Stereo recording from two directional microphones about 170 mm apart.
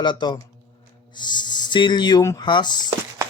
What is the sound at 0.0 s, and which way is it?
Chopping, 25° left (ahead or behind).